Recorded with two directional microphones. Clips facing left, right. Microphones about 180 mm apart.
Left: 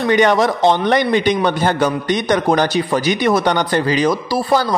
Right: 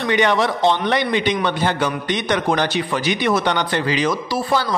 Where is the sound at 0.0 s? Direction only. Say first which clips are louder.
Left 4 dB; 45° left (ahead or behind).